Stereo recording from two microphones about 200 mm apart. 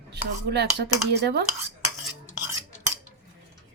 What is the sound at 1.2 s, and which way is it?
Speech, 55° right (ahead or behind).